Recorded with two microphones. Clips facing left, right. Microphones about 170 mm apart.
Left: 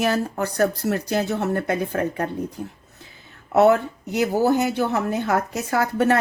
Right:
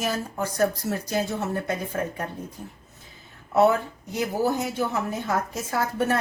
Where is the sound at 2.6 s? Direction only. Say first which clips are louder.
Left 7 dB; 90° left.